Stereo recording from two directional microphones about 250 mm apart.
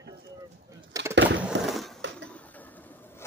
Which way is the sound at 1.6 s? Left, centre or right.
Centre.